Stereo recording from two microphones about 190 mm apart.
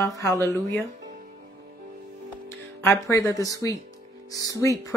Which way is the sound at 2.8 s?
15° left (ahead or behind).